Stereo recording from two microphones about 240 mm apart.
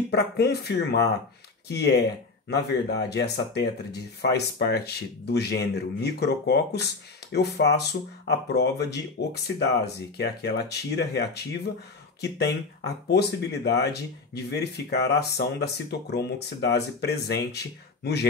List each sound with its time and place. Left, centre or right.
0.1 s speech: left